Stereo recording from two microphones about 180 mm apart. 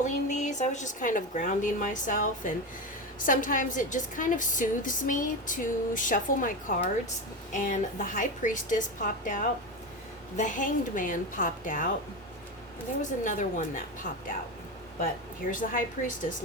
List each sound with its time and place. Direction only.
0.0 s a woman's voice: 40° left (ahead or behind)
13.0 s a woman's voice: 45° left (ahead or behind)
15.4 s a woman's voice: 50° left (ahead or behind)